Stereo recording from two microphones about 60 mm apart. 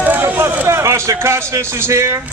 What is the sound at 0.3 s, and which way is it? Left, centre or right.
A man's voice, right.